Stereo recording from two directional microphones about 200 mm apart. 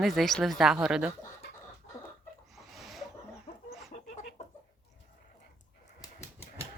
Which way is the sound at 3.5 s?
30° left (ahead or behind).